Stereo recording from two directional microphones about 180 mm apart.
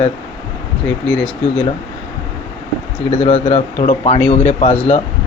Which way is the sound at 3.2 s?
30° left (ahead or behind).